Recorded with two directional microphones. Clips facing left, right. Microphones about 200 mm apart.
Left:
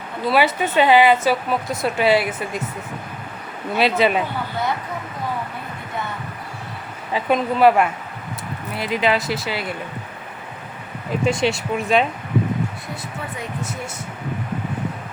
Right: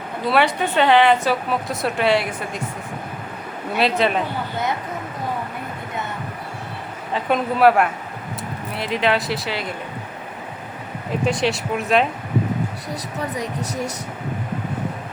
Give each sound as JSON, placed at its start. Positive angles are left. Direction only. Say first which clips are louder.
{"t": 0.3, "sound": "a woman's voice", "louder": "even", "side_deg": 5}
{"t": 3.8, "sound": "a woman's voice", "louder": "left 1 dB", "side_deg": 0}
{"t": 7.1, "sound": "a woman's voice", "louder": "left 1 dB", "side_deg": 0}
{"t": 11.3, "sound": "a woman's voice", "louder": "left 1 dB", "side_deg": 0}
{"t": 13.3, "sound": "speech", "louder": "right 3 dB", "side_deg": -40}